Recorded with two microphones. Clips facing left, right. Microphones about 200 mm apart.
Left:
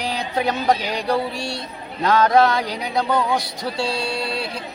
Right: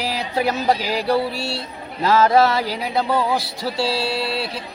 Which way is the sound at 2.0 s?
5° right (ahead or behind).